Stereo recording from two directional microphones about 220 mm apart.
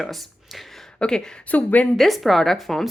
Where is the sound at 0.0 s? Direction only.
Centre (ahead or behind).